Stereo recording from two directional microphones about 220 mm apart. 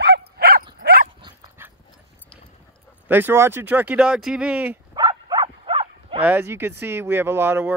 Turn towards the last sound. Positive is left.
turn(degrees=-10)  # may be behind; listen again after turning